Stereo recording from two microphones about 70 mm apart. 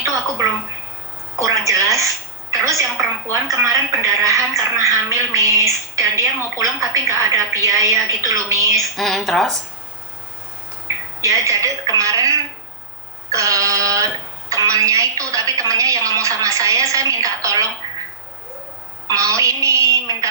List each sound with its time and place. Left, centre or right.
0.0 s a sound: right
1.4 s a woman's voice: right
9.0 s speech: centre
11.2 s a woman's voice: right
19.0 s a woman's voice: right